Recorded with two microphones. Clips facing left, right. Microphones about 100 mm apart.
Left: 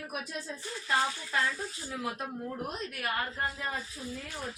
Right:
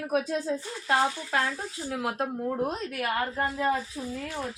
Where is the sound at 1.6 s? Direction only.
70° right (ahead or behind).